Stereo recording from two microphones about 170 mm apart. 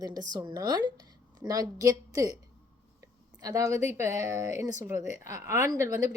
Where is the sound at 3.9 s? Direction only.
15° right (ahead or behind).